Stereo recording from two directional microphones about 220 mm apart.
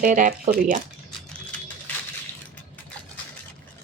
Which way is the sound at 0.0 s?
35° right (ahead or behind).